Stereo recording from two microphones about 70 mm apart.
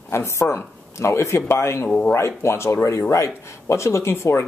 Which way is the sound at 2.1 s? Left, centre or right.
Left.